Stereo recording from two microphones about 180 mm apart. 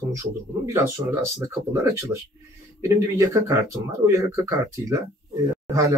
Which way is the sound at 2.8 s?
15° right (ahead or behind).